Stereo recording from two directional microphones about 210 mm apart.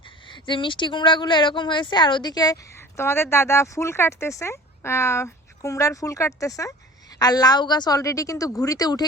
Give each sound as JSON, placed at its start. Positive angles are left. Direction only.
{"t": 0.3, "sound": "speech", "side_deg": 20}